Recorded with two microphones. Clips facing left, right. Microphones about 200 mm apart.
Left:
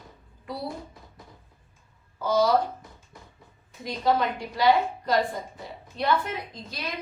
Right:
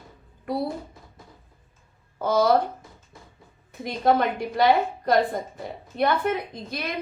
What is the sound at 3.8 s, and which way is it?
Speech, 55° right (ahead or behind).